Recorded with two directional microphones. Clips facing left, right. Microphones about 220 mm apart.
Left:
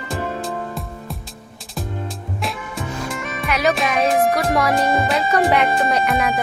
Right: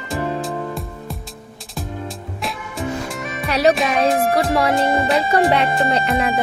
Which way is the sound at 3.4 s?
35° right (ahead or behind).